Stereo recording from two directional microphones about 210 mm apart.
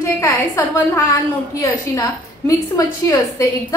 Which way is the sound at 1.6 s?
15° left (ahead or behind).